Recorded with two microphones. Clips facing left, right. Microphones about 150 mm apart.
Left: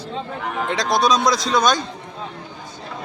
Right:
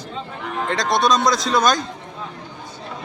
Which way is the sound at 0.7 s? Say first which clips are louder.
Even; centre (ahead or behind).